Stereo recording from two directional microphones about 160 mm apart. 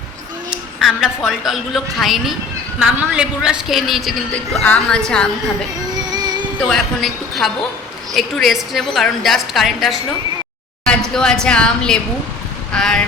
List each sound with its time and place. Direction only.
0.5 s a woman's voice: centre (ahead or behind)
5.9 s vehicle: 25° right (ahead or behind)
6.6 s a woman's voice: 5° left (ahead or behind)
10.8 s a sound: 5° left (ahead or behind)
11.4 s a woman's voice: 5° left (ahead or behind)